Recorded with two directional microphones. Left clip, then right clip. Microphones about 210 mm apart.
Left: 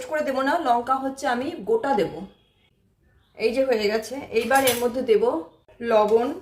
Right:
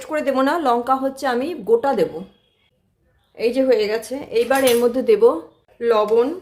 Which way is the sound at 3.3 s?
50° right (ahead or behind).